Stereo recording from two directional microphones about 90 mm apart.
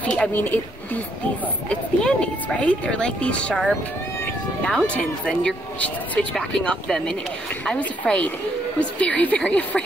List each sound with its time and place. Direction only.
0.0 s speech: 15° left (ahead or behind)
1.7 s speech: 10° left (ahead or behind)